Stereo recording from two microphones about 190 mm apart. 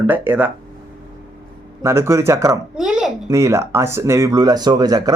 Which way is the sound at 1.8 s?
15° right (ahead or behind).